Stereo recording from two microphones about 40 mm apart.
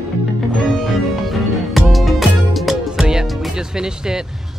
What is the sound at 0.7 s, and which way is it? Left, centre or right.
Music, centre.